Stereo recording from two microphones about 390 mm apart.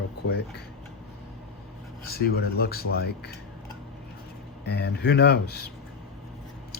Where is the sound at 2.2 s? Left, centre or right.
Left.